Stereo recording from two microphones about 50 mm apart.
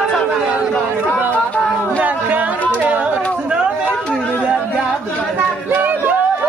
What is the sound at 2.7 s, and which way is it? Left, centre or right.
Chatter, right.